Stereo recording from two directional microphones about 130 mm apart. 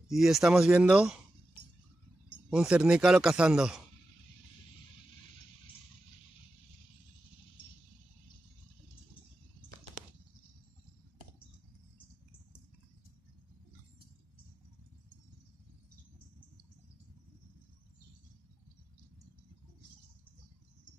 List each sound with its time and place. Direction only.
0.1 s speech: 5° right (ahead or behind)
2.5 s speech: 5° right (ahead or behind)